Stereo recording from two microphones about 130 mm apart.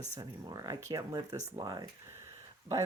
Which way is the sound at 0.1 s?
30° right (ahead or behind).